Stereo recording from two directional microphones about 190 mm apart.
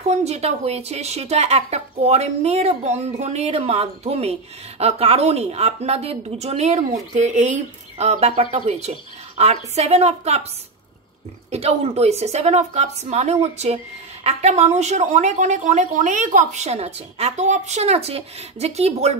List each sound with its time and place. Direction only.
0.0 s a woman's voice: 35° right (ahead or behind)
11.5 s a woman's voice: 35° right (ahead or behind)